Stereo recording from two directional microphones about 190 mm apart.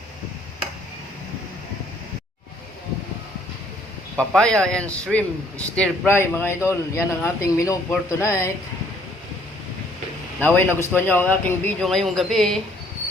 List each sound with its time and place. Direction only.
4.3 s a man's voice: 5° left (ahead or behind)
10.4 s a man's voice: 10° left (ahead or behind)